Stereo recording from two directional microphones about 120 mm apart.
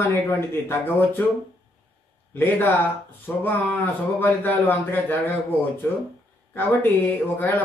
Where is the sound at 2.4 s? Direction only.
15° left (ahead or behind).